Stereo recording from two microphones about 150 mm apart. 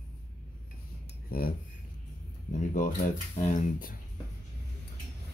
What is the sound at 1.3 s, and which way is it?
Speech, 75° left (ahead or behind).